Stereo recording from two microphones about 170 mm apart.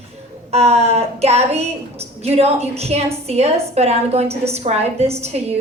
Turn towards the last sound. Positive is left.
turn(degrees=-40)  # may be behind; listen again after turning